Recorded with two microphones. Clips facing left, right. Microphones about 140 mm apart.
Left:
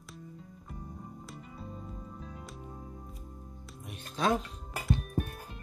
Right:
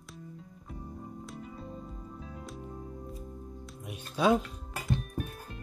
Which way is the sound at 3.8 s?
10° right (ahead or behind).